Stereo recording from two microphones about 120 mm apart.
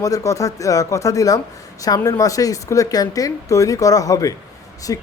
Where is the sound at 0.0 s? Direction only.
30° left (ahead or behind).